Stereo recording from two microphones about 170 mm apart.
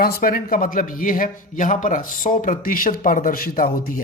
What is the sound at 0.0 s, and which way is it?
A man's voice, 60° left (ahead or behind).